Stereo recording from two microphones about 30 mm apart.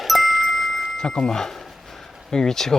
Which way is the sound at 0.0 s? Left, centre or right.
Centre.